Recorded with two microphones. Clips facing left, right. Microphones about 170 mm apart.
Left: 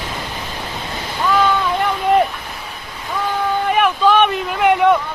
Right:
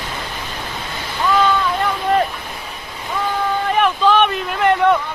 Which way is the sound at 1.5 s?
15° left (ahead or behind).